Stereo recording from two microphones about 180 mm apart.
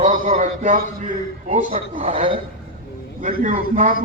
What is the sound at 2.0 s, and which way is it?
A man's voice, 35° right (ahead or behind).